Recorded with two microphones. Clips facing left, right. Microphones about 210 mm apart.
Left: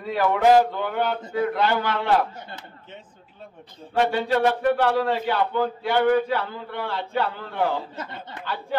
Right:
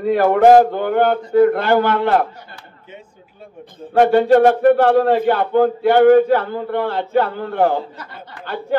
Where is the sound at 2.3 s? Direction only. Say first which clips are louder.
Even; 20° left (ahead or behind).